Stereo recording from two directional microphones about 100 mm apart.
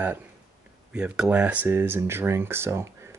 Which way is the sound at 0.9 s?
5° right (ahead or behind).